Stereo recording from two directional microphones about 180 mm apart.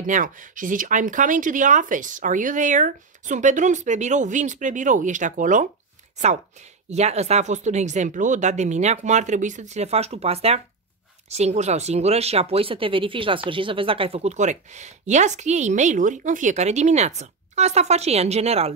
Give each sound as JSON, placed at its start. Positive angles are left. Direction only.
{"t": 0.0, "sound": "speech", "side_deg": -45}
{"t": 6.9, "sound": "speech", "side_deg": -40}